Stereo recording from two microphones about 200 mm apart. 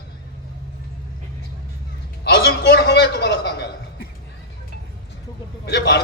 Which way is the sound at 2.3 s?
55° left (ahead or behind).